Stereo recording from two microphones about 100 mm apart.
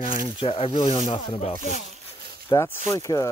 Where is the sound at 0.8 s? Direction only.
50° left (ahead or behind).